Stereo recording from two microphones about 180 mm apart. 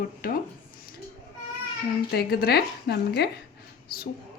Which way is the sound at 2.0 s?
60° left (ahead or behind).